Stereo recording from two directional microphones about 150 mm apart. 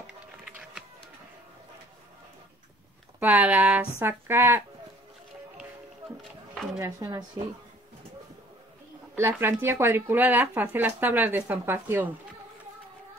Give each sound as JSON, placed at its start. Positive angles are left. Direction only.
{"t": 3.2, "sound": "speech", "side_deg": -10}
{"t": 6.8, "sound": "speech", "side_deg": -25}
{"t": 9.1, "sound": "speech", "side_deg": -15}